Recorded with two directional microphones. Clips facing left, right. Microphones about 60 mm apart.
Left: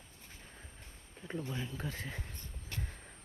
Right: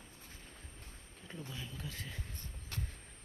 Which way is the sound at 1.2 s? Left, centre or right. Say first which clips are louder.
Left 7 dB; left.